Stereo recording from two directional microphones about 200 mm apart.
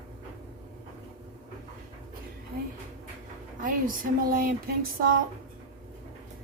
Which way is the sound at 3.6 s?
45° right (ahead or behind).